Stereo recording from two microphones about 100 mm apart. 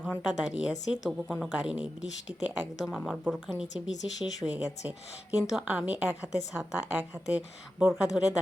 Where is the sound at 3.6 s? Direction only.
5° right (ahead or behind).